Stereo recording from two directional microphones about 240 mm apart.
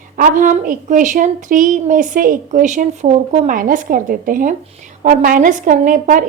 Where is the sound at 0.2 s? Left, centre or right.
Right.